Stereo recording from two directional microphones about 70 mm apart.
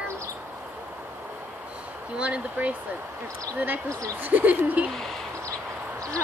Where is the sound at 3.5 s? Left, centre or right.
Right.